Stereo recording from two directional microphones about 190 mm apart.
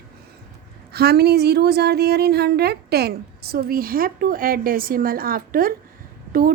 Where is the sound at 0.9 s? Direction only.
55° right (ahead or behind).